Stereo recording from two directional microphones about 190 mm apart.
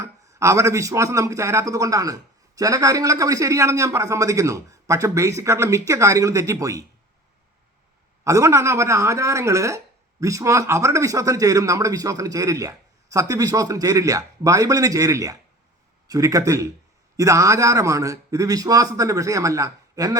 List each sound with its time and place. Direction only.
0.0 s speech: 15° right (ahead or behind)
8.2 s speech: 15° right (ahead or behind)